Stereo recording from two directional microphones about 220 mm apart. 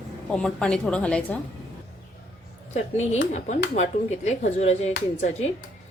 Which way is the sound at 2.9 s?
30° left (ahead or behind).